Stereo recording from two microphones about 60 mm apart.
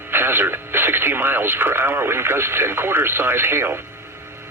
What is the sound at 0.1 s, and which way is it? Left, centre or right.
Speech, right.